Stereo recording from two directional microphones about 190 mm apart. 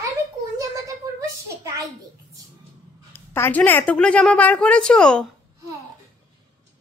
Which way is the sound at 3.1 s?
10° left (ahead or behind).